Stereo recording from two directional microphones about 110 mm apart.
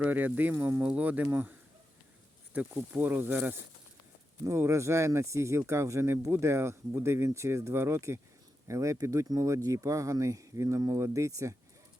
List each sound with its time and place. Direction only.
0.0 s speech: 15° right (ahead or behind)